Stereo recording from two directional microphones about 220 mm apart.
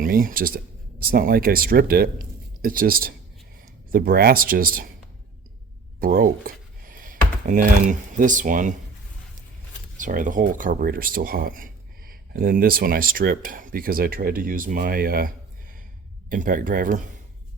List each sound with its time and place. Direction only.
0.0 s speech: 40° right (ahead or behind)
6.0 s speech: 40° right (ahead or behind)
10.0 s speech: 35° right (ahead or behind)
16.3 s speech: 40° right (ahead or behind)